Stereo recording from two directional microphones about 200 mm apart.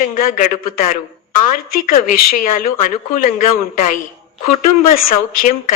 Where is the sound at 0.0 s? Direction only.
45° left (ahead or behind).